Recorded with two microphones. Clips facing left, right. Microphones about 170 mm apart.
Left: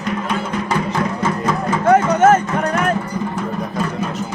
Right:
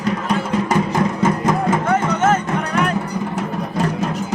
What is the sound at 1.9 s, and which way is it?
Music, 50° left (ahead or behind).